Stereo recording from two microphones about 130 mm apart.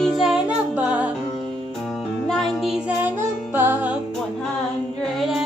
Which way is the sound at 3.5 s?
15° right (ahead or behind).